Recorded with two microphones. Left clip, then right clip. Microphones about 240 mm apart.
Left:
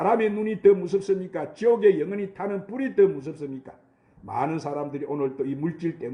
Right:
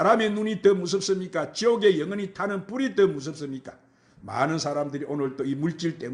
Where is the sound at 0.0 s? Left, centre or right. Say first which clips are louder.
Right 1 dB; right.